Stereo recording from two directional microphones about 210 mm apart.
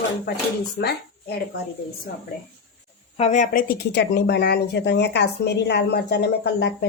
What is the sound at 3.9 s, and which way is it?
Speech, 50° left (ahead or behind).